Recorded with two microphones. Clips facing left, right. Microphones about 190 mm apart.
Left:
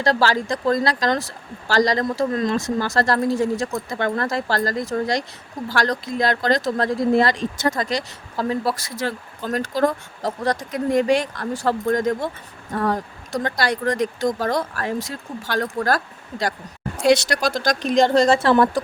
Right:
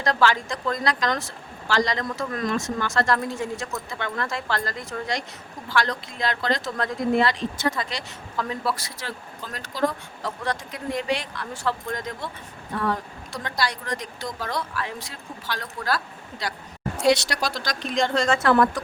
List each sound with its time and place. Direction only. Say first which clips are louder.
0.0 s speech: left 3 dB; 35° left (ahead or behind)
17.1 s speech: left 4 dB; 45° left (ahead or behind); by 18.8 s 30° left (ahead or behind)